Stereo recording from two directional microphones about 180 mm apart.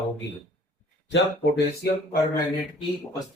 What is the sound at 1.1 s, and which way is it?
Speech, 65° left (ahead or behind).